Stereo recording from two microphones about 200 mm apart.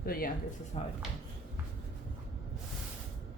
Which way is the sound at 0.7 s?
30° left (ahead or behind).